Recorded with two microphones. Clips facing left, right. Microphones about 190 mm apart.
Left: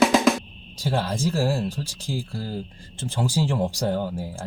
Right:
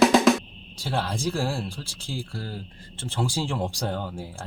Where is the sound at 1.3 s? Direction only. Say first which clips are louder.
Left 4 dB; 40° left (ahead or behind).